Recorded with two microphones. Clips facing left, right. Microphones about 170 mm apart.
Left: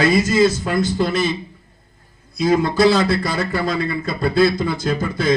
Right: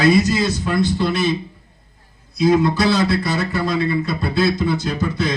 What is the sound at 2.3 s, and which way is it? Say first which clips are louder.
Speech: right 2 dB; 45° left (ahead or behind).